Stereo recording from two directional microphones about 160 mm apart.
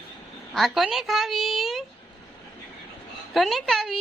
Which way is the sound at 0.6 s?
Centre (ahead or behind).